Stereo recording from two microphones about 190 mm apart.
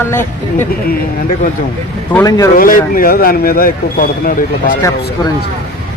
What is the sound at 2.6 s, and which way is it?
Speech, 50° left (ahead or behind).